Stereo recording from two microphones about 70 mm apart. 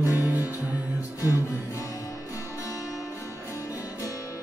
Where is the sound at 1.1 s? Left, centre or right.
Left.